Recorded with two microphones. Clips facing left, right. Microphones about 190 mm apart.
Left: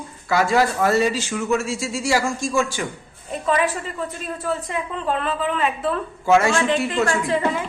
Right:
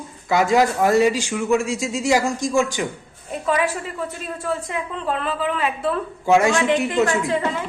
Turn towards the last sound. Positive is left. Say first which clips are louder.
# left 1 dB
turn(degrees=0)  # may be behind; listen again after turning